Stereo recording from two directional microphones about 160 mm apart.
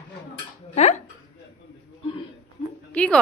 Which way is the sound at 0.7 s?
45° left (ahead or behind).